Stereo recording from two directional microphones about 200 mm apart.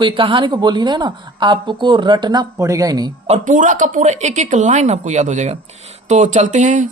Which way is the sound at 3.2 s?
35° right (ahead or behind).